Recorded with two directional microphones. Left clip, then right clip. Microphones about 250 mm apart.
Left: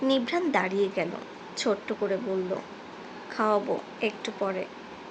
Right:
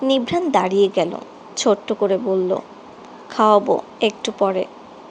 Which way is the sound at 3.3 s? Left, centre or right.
Right.